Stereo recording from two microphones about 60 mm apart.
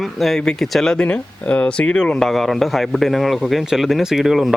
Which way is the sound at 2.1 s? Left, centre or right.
Centre.